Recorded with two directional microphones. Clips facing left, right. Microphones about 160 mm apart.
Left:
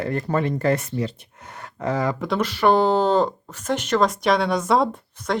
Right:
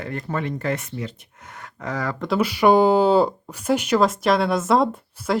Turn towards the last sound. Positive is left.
turn(degrees=0)  # may be behind; listen again after turning